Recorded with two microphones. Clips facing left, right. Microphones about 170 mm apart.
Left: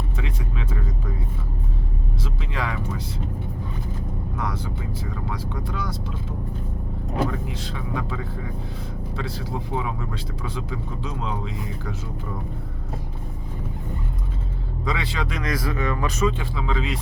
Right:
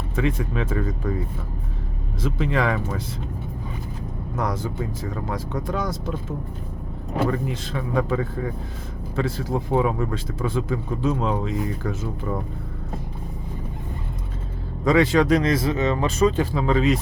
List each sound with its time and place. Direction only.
0.2 s speech: 55° right (ahead or behind)
2.2 s speech: 50° right (ahead or behind)
4.4 s speech: 45° right (ahead or behind)
7.3 s speech: 50° right (ahead or behind)
14.8 s speech: 45° right (ahead or behind)
15.4 s speech: 25° right (ahead or behind); by 17.0 s 45° right (ahead or behind)